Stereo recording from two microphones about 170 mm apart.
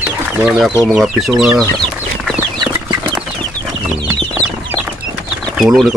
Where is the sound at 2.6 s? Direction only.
20° right (ahead or behind).